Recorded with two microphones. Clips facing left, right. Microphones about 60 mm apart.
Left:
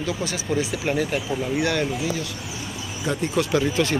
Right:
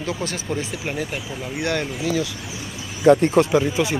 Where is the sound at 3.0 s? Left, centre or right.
Right.